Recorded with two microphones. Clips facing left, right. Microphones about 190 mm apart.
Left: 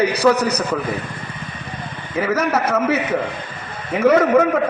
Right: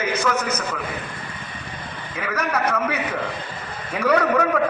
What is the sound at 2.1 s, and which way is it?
Speech, 25° left (ahead or behind).